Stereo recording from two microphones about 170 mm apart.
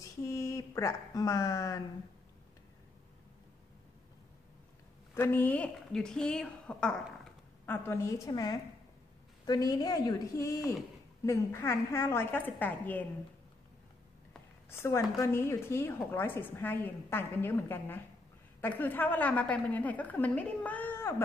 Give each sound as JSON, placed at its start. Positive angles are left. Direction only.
{"t": 0.0, "sound": "speech", "side_deg": 20}
{"t": 5.1, "sound": "a woman's voice", "side_deg": 10}
{"t": 14.7, "sound": "a woman's voice", "side_deg": 15}